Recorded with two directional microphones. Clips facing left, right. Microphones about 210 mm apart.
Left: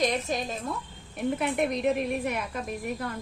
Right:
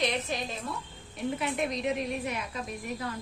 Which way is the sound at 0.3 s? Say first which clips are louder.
Left 4 dB; 45° left (ahead or behind).